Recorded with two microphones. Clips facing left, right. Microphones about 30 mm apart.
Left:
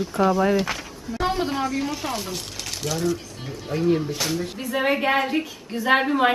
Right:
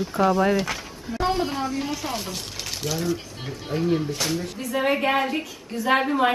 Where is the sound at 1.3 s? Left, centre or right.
Centre.